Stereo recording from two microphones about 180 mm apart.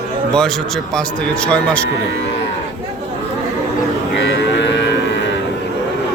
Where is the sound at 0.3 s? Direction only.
5° left (ahead or behind).